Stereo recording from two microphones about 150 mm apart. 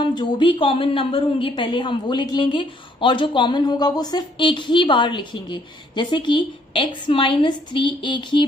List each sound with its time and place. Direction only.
0.0 s a woman's voice: 30° left (ahead or behind)